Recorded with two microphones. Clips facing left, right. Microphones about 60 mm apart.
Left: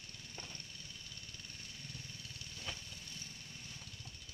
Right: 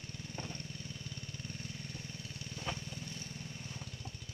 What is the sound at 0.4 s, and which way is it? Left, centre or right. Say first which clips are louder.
Vehicle: right 7 dB; right.